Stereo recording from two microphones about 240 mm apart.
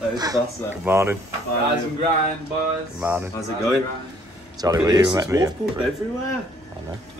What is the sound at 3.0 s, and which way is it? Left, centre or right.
Speech, centre.